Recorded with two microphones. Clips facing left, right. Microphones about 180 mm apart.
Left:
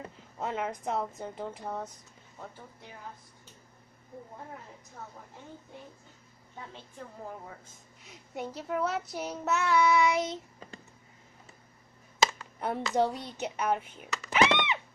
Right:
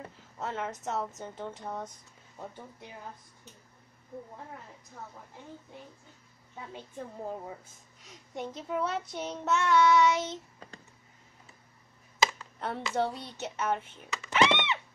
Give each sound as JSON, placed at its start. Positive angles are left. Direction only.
{"t": 0.0, "sound": "speech", "side_deg": 15}
{"t": 8.1, "sound": "child singing", "side_deg": 5}
{"t": 12.5, "sound": "child singing", "side_deg": 15}
{"t": 13.9, "sound": "a sound", "side_deg": 15}